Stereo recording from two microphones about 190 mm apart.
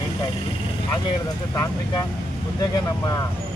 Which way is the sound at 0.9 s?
20° left (ahead or behind).